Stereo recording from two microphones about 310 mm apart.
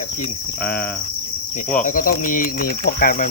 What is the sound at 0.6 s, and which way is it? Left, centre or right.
Insect, left.